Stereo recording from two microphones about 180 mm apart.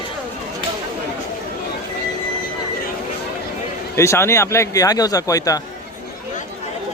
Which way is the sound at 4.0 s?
15° left (ahead or behind).